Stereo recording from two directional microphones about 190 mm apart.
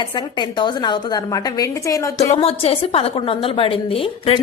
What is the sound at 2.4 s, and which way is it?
A woman's voice, 30° left (ahead or behind).